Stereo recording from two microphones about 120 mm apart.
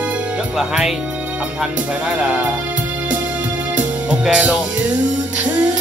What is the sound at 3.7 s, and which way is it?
Music, 10° right (ahead or behind).